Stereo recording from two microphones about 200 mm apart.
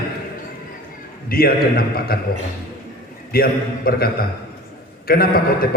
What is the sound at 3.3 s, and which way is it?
Speech, 50° left (ahead or behind).